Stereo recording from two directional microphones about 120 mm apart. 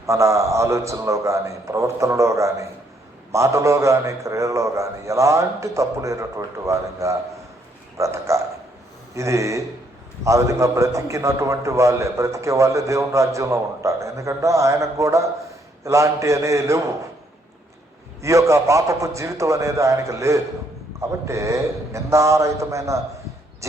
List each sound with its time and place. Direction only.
0.0 s a man's voice: 25° right (ahead or behind)
18.2 s a man's voice: 25° right (ahead or behind)